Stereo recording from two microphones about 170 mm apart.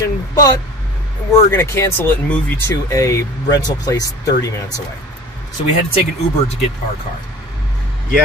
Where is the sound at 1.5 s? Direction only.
15° left (ahead or behind).